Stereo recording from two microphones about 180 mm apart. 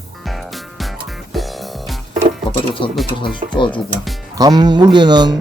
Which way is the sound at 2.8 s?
30° left (ahead or behind).